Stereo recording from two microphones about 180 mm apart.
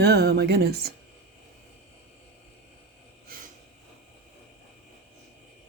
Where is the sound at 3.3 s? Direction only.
50° right (ahead or behind).